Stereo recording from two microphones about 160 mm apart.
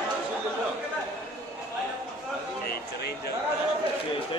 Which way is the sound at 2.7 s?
85° left.